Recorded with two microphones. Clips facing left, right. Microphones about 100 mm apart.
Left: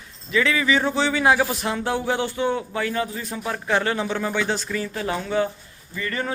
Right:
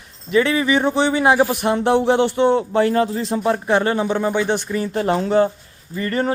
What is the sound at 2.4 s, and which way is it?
A man's voice, 40° right (ahead or behind).